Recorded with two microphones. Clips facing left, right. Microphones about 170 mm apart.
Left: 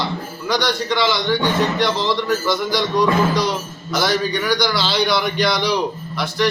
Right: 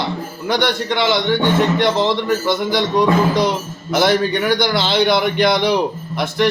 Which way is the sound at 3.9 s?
55° right (ahead or behind).